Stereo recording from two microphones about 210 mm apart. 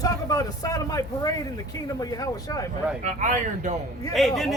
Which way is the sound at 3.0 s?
35° right (ahead or behind).